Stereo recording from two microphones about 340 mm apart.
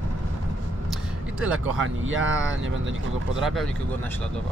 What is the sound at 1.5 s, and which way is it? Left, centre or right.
Speech, right.